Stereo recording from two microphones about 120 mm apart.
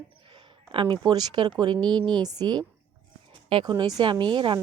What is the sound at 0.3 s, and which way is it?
Speech, 45° right (ahead or behind).